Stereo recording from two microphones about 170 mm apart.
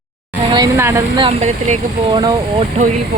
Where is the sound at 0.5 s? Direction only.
20° right (ahead or behind).